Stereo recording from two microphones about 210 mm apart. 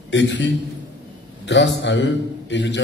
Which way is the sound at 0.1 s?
60° left (ahead or behind).